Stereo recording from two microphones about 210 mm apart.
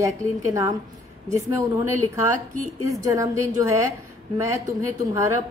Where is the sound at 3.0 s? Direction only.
15° right (ahead or behind).